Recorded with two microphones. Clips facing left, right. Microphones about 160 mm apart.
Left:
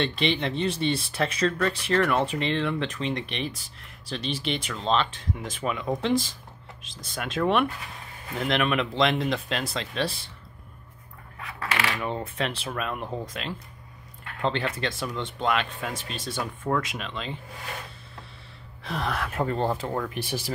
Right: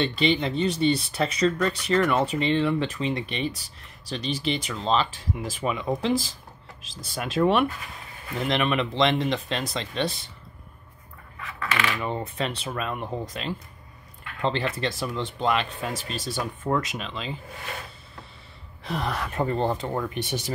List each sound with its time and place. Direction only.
0.0 s speech: centre (ahead or behind)
12.0 s speech: centre (ahead or behind)
18.9 s speech: centre (ahead or behind)